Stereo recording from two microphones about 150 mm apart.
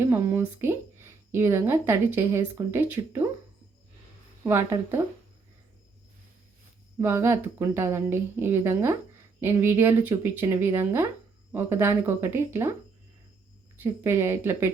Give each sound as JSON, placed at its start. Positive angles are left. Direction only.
{"t": 0.0, "sound": "speech", "side_deg": -15}
{"t": 4.4, "sound": "speech", "side_deg": -20}
{"t": 7.0, "sound": "speech", "side_deg": -15}
{"t": 13.7, "sound": "speech", "side_deg": -15}